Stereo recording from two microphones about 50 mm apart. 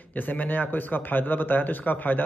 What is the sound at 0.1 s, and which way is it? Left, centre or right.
A man's voice, left.